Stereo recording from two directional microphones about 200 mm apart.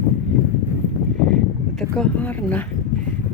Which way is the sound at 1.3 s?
5° left (ahead or behind).